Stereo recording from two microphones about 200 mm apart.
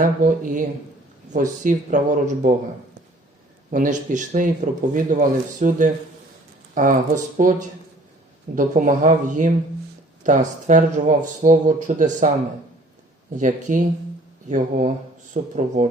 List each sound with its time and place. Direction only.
0.0 s speech: 40° right (ahead or behind)
3.7 s speech: 40° right (ahead or behind)
8.5 s speech: 40° right (ahead or behind)
13.3 s speech: 40° right (ahead or behind)